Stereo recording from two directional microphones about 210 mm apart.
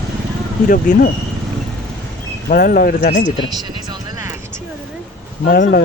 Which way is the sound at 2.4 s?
45° left (ahead or behind).